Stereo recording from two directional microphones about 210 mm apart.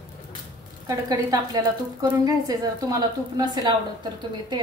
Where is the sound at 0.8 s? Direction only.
15° right (ahead or behind).